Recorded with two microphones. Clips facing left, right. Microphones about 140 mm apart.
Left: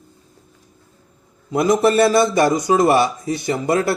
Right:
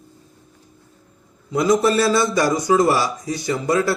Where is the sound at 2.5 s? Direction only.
25° left (ahead or behind).